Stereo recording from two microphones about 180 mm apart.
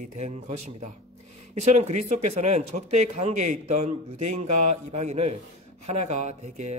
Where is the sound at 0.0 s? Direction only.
40° right (ahead or behind).